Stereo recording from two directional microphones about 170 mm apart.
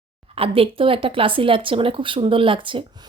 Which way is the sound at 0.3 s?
35° right (ahead or behind).